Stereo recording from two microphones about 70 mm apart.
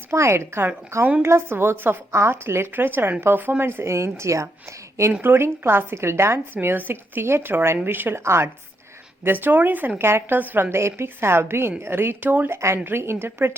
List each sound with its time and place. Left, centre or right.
0.1 s a woman's voice: right
5.2 s a woman's voice: right
9.2 s a woman's voice: right
12.5 s a woman's voice: right